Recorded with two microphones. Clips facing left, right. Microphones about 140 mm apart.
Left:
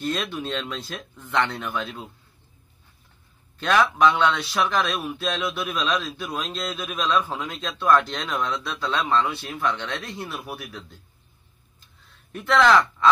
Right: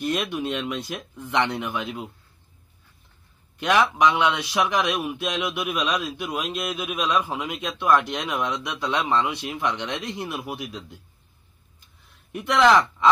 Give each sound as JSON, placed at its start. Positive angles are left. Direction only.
{"t": 0.0, "sound": "a man's voice", "side_deg": -15}
{"t": 3.5, "sound": "a man's voice", "side_deg": -15}
{"t": 12.3, "sound": "speech", "side_deg": -15}